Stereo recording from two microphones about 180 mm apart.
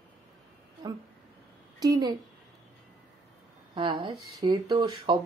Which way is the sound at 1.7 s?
20° right (ahead or behind).